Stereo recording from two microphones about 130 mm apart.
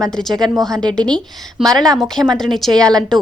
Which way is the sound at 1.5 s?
5° left (ahead or behind).